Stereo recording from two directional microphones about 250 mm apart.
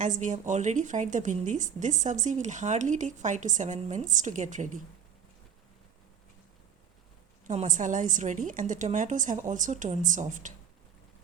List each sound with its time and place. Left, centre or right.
0.0 s a woman's voice: right
7.4 s a woman's voice: right